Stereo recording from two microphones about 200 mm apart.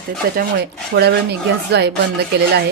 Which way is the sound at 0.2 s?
50° right (ahead or behind).